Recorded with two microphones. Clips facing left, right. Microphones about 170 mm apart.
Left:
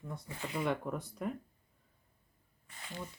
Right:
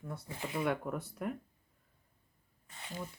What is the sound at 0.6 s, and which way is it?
Speech, 5° right (ahead or behind).